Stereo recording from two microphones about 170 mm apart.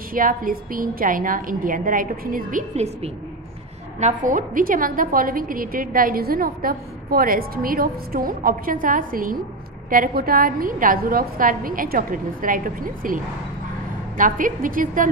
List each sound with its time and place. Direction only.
0.1 s a woman's voice: 55° right (ahead or behind)